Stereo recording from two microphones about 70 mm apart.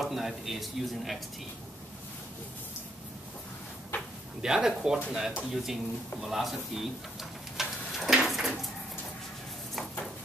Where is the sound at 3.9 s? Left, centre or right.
Left.